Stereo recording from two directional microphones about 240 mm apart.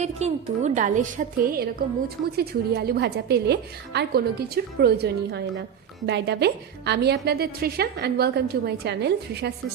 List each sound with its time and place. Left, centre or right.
0.0 s a woman's voice: right